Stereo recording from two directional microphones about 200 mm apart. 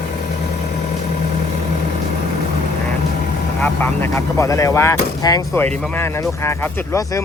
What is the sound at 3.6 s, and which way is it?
Speech, 10° left (ahead or behind).